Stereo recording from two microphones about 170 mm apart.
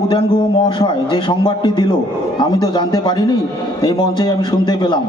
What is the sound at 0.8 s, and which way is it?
A man's voice, 30° left (ahead or behind).